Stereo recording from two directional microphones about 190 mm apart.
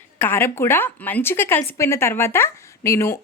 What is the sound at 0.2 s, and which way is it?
Speech, 10° left (ahead or behind).